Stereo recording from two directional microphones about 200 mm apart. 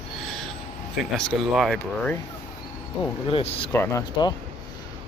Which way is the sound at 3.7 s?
15° left (ahead or behind).